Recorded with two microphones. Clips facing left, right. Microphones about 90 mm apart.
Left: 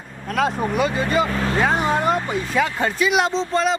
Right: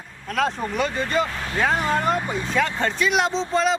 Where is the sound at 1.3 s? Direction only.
60° left (ahead or behind).